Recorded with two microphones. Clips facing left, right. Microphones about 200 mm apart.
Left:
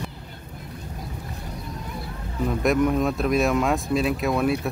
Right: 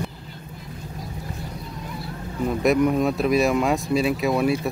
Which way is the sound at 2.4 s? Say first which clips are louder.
Right 2 dB; centre (ahead or behind).